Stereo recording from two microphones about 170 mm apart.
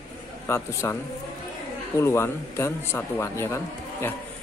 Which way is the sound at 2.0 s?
15° left (ahead or behind).